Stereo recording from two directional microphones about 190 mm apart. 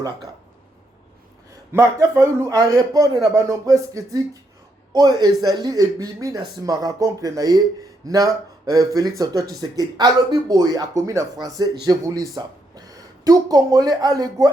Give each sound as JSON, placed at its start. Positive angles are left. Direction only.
{"t": 1.7, "sound": "a man's voice", "side_deg": -15}